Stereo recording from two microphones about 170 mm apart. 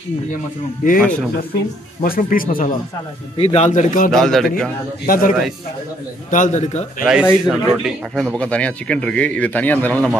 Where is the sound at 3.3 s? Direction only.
35° left (ahead or behind).